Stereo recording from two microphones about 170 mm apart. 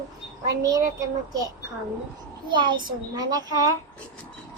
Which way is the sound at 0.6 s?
20° right (ahead or behind).